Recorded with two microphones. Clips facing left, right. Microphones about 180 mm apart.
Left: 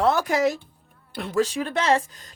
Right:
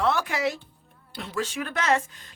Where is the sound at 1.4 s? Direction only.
35° left (ahead or behind).